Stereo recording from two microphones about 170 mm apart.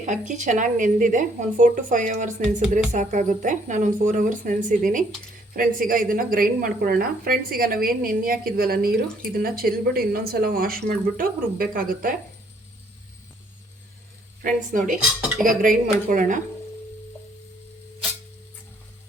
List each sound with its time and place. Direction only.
0.0 s a woman's voice: 45° right (ahead or behind)
14.4 s a woman's voice: 50° right (ahead or behind)